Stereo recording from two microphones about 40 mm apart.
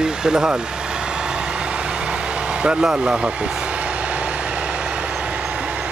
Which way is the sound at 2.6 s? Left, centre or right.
Right.